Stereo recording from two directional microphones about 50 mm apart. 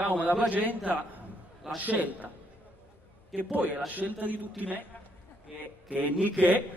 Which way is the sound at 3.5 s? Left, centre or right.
Right.